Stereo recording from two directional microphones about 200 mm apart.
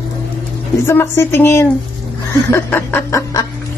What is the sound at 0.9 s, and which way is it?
Speech, 10° left (ahead or behind).